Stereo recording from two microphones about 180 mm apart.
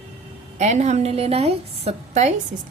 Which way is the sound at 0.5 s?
40° right (ahead or behind).